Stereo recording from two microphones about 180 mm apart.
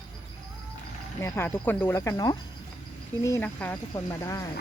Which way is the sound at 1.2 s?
15° left (ahead or behind).